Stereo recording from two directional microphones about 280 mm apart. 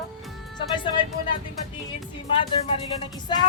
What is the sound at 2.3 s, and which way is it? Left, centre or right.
Speech, centre.